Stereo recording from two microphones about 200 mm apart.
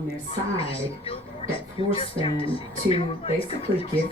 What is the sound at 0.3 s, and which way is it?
A woman's voice, 30° left (ahead or behind).